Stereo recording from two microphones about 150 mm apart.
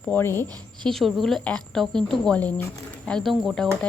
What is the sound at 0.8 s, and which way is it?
Speech, centre (ahead or behind).